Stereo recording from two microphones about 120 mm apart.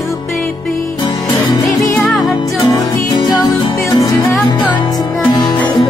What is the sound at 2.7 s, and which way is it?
Music, 30° left (ahead or behind).